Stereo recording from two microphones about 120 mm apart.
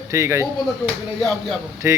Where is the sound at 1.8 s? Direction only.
25° right (ahead or behind).